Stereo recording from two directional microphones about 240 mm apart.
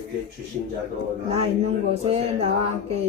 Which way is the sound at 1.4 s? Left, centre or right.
Right.